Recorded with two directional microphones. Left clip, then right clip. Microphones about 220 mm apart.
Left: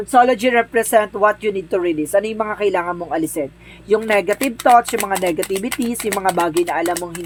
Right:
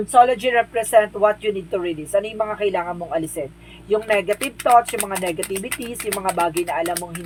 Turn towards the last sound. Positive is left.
turn(degrees=45)  # may be behind; listen again after turning